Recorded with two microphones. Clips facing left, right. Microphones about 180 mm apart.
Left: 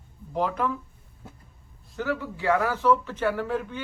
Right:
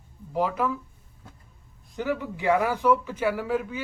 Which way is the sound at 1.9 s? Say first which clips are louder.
Right 1 dB; 15° right (ahead or behind).